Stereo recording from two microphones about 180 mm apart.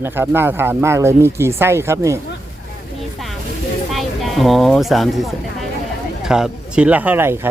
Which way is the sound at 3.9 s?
Centre (ahead or behind).